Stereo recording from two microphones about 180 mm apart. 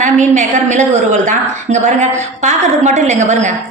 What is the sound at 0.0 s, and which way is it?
A woman's voice, 45° right (ahead or behind).